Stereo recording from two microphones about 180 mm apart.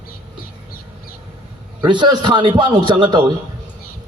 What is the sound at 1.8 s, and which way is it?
A man's voice, 25° right (ahead or behind).